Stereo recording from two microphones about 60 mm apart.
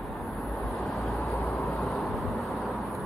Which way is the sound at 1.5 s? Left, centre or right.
Centre.